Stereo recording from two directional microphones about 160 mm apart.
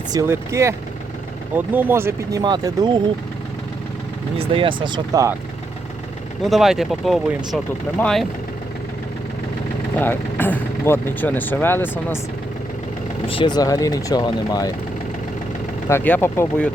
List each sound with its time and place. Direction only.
0.1 s speech: 20° right (ahead or behind)
2.4 s speech: 25° right (ahead or behind)
4.4 s speech: 35° right (ahead or behind)
6.4 s speech: centre (ahead or behind)
10.0 s speech: 10° left (ahead or behind)
13.2 s speech: 30° left (ahead or behind)
15.9 s speech: 10° left (ahead or behind)